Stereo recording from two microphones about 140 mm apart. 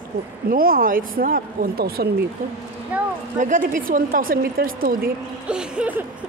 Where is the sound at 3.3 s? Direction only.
65° right (ahead or behind); by 5.1 s 90° right.